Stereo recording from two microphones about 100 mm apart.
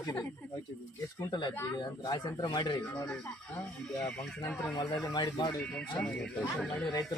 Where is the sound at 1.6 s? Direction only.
35° left (ahead or behind).